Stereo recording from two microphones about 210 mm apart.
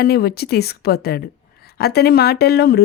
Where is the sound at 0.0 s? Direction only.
50° left (ahead or behind).